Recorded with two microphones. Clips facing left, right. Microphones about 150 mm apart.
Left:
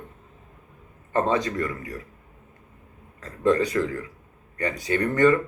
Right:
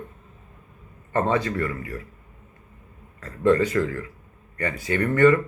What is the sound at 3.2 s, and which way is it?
A man's voice, 15° left (ahead or behind).